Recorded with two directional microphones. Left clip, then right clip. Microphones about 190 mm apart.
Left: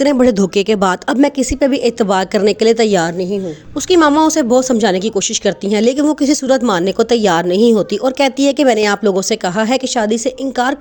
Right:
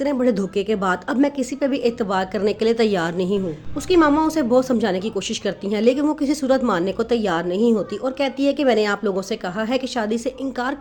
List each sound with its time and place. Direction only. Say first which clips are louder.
0.0 s speech: left 8 dB; 50° left (ahead or behind)
3.8 s a woman's voice: left 6 dB; 45° left (ahead or behind)